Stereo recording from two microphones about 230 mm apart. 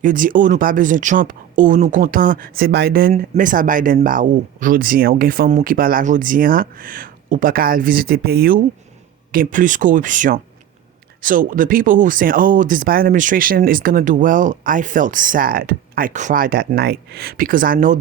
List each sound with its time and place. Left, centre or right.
0.0 s speech: right